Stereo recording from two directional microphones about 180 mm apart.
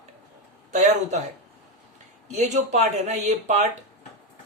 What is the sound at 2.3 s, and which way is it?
Speech, 40° right (ahead or behind).